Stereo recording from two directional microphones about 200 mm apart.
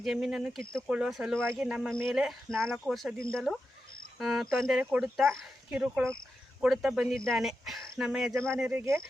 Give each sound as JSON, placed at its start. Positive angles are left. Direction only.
{"t": 0.0, "sound": "speech", "side_deg": 0}
{"t": 8.8, "sound": "speech", "side_deg": -15}